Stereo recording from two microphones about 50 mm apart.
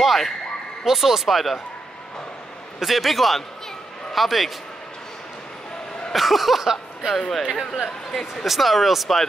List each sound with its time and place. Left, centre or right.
0.0 s basketball bounce: centre
0.8 s speech: centre
2.8 s speech: centre
6.1 s speech: centre
7.2 s speech: centre